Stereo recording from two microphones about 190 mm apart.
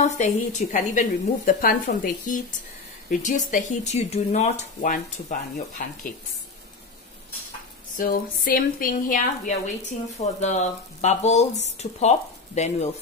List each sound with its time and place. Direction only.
0.0 s a woman's voice: 40° left (ahead or behind)
8.0 s speech: 50° left (ahead or behind)